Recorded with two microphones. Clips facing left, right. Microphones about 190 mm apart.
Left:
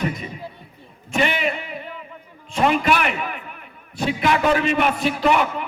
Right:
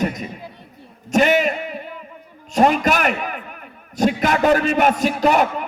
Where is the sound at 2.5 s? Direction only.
40° right (ahead or behind).